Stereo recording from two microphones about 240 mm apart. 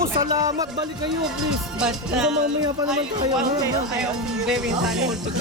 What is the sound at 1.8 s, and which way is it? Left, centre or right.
Speech, centre.